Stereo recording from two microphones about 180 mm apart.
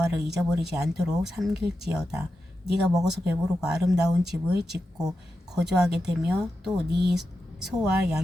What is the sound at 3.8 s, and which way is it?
Speech, 20° right (ahead or behind).